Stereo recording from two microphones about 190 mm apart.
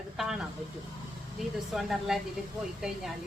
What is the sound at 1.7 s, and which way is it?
Speech, centre (ahead or behind).